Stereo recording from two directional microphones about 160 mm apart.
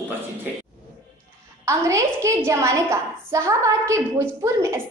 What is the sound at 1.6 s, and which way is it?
A woman's voice, 20° right (ahead or behind).